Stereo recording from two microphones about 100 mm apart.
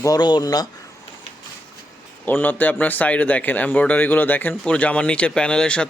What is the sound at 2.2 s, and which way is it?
A man's voice, 20° left (ahead or behind).